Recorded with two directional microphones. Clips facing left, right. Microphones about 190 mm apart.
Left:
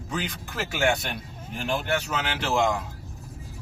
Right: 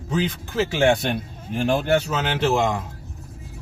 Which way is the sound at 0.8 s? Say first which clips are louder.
Right 6 dB; 30° right (ahead or behind).